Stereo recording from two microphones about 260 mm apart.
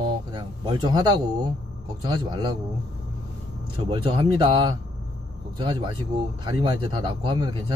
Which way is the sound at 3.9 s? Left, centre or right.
Centre.